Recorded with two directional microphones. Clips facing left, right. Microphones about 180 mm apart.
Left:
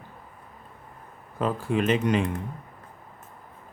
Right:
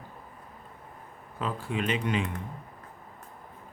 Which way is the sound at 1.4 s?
45° left (ahead or behind).